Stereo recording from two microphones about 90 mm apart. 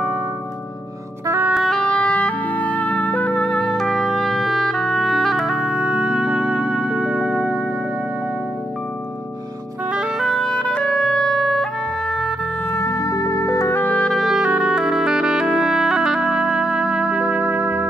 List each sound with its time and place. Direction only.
1.5 s music: centre (ahead or behind); by 7.6 s 15° right (ahead or behind)
9.9 s music: centre (ahead or behind)
12.7 s music: 35° left (ahead or behind)
14.0 s music: centre (ahead or behind)
14.4 s music: 15° right (ahead or behind)